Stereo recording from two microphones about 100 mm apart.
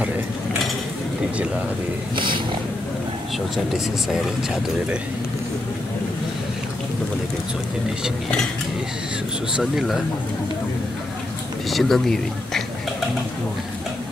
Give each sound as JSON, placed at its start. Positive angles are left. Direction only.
{"t": 2.1, "sound": "speech", "side_deg": -55}
{"t": 3.5, "sound": "speech", "side_deg": -5}
{"t": 9.6, "sound": "speech", "side_deg": -5}
{"t": 11.7, "sound": "speech", "side_deg": 0}